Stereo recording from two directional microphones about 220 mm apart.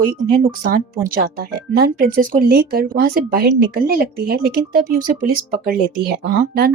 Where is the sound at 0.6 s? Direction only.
40° right (ahead or behind).